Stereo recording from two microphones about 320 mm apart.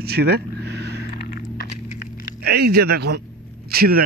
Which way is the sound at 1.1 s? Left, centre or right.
Left.